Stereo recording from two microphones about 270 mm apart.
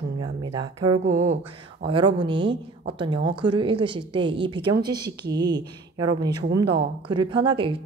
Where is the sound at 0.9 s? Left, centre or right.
Right.